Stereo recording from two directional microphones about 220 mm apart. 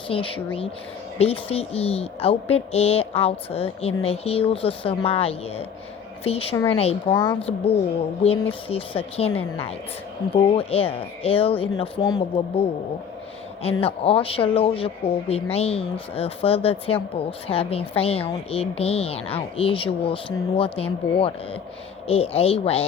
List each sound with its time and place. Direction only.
0.1 s speech: 25° left (ahead or behind)
10.5 s speech: 25° left (ahead or behind)
13.6 s speech: 25° left (ahead or behind)